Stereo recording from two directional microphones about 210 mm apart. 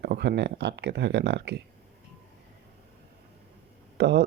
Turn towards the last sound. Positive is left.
turn(degrees=-55)  # may be behind; listen again after turning